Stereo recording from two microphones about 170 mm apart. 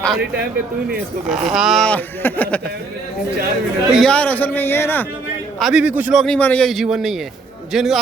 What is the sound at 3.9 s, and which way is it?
Speech, 5° left (ahead or behind).